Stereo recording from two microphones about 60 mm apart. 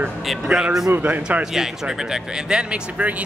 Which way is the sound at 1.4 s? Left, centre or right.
Centre.